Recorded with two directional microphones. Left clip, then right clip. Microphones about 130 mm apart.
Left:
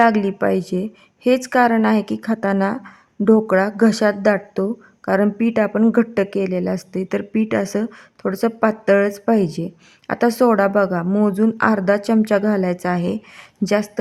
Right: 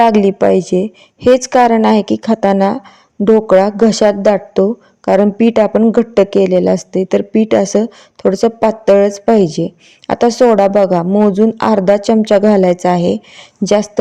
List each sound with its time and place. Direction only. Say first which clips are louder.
0.0 s a woman's voice: right 7 dB; 30° right (ahead or behind)
11.0 s a man's voice: right 8 dB; centre (ahead or behind)
11.3 s a woman's voice: right 6 dB; 20° right (ahead or behind)